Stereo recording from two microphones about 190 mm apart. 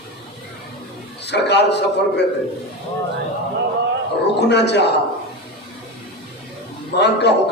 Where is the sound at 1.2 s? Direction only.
65° left (ahead or behind).